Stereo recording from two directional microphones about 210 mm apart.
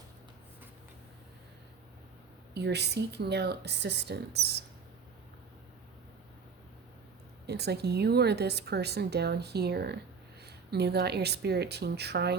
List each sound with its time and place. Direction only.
2.6 s a woman's voice: 50° right (ahead or behind)
7.4 s a woman's voice: 50° right (ahead or behind)